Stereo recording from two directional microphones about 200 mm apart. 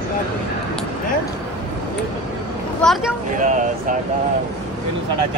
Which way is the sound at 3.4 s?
40° right (ahead or behind).